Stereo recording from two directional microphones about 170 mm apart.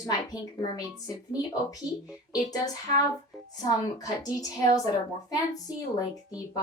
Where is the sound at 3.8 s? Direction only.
20° left (ahead or behind).